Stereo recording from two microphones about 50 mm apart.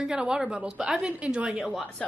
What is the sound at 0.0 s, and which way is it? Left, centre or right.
A woman's voice, centre.